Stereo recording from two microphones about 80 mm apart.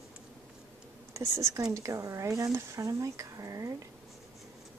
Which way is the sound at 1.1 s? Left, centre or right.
Right.